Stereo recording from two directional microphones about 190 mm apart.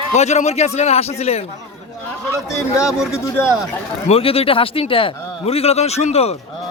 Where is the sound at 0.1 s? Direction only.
35° left (ahead or behind).